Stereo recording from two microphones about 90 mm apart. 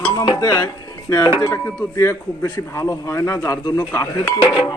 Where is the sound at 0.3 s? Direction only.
40° left (ahead or behind).